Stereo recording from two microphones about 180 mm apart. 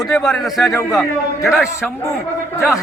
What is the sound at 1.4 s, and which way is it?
Speech, 5° right (ahead or behind).